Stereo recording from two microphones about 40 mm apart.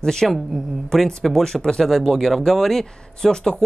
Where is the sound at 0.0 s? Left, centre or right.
Centre.